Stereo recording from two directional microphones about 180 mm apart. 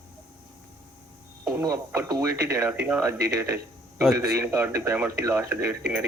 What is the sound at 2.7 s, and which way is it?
Speech, 5° right (ahead or behind).